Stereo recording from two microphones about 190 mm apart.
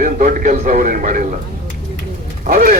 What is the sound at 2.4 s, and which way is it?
Speech, 50° right (ahead or behind).